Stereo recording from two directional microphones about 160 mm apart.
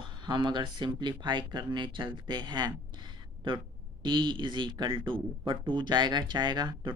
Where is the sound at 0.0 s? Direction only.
30° right (ahead or behind).